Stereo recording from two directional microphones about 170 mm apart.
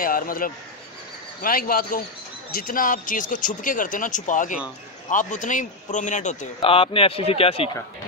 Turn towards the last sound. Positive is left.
turn(degrees=35)  # may be behind; listen again after turning